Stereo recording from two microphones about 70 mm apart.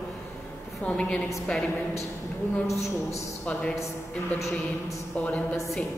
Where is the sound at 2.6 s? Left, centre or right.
Left.